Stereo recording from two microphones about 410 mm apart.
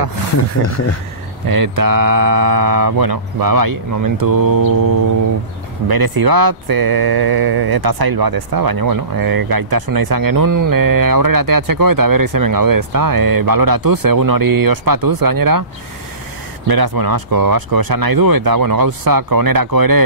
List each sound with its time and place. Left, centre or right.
0.4 s speech: left
1.5 s speech: right
16.6 s speech: right